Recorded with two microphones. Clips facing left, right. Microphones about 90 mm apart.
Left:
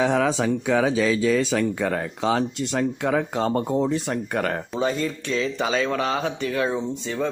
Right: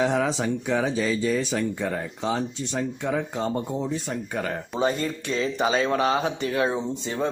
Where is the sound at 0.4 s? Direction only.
90° left; by 4.5 s 65° left (ahead or behind).